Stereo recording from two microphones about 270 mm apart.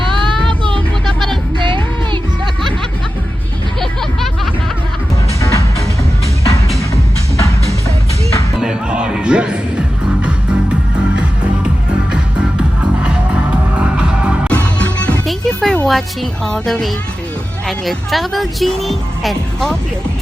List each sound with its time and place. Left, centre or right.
0.2 s child singing: centre
1.0 s music: centre
1.5 s music: centre
5.4 s music: centre
7.3 s music: centre
8.5 s music: centre
10.9 s music: centre
16.5 s speech: centre